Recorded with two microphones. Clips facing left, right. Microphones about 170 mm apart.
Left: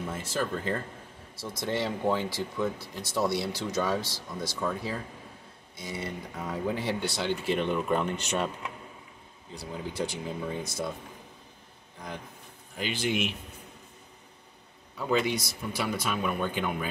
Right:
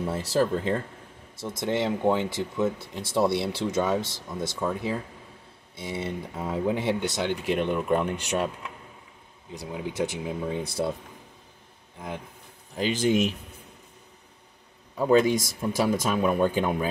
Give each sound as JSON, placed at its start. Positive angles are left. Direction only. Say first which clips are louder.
{"t": 0.0, "sound": "speech", "louder": "right 7 dB", "side_deg": -35}
{"t": 1.3, "sound": "speech", "louder": "right 4 dB", "side_deg": -25}
{"t": 9.5, "sound": "speech", "louder": "right 3 dB", "side_deg": -15}
{"t": 10.6, "sound": "speech", "louder": "right 5 dB", "side_deg": -30}
{"t": 12.7, "sound": "speech", "louder": "right 7 dB", "side_deg": -40}
{"t": 15.0, "sound": "speech", "louder": "right 7 dB", "side_deg": -45}